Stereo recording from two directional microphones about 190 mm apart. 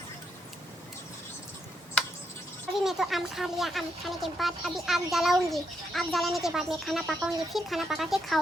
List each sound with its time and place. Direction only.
2.8 s speech: centre (ahead or behind)